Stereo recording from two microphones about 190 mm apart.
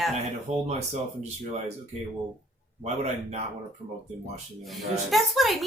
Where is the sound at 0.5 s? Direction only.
35° right (ahead or behind).